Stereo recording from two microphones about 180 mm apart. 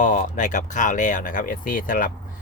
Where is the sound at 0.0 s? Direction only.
45° left (ahead or behind).